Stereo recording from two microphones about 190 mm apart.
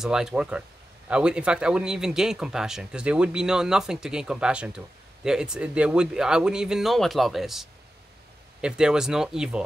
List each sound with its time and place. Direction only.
0.0 s speech: centre (ahead or behind)